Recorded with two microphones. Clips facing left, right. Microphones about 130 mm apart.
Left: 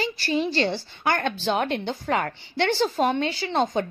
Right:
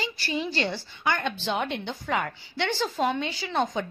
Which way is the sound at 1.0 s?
40° left (ahead or behind).